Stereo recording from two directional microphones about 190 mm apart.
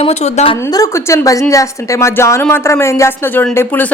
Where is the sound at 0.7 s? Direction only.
15° left (ahead or behind).